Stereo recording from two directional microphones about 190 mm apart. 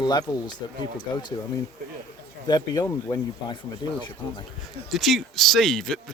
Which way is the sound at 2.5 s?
20° left (ahead or behind).